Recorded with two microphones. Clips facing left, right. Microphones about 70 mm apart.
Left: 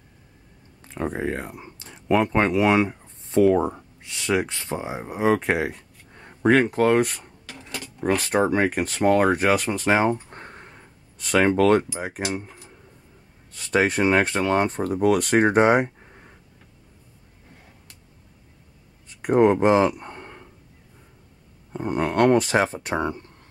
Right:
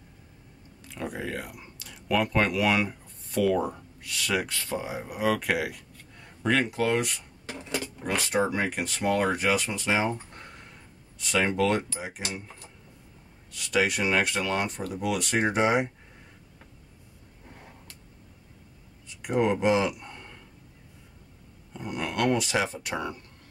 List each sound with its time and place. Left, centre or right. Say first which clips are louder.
0.8 s speech: left 7 dB; left
7.4 s a sound: right 4 dB; right
8.0 s speech: left 6 dB; left
10.3 s a sound: left 5 dB; left
12.2 s speech: left 10 dB; left
13.5 s speech: left 4 dB; left
19.0 s speech: left 8 dB; left
21.7 s speech: left 8 dB; left